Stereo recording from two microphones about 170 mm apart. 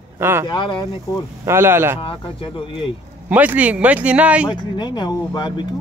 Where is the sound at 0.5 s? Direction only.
25° left (ahead or behind).